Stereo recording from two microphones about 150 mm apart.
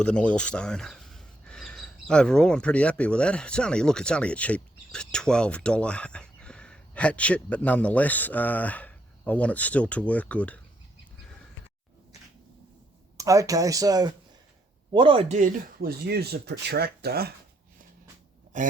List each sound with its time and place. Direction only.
0.0 s speech: 10° left (ahead or behind)
13.1 s speech: 20° right (ahead or behind)
14.9 s speech: 35° right (ahead or behind)
15.3 s speech: 70° right (ahead or behind); by 17.3 s 90° right